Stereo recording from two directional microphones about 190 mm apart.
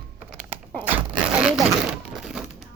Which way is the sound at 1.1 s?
5° right (ahead or behind).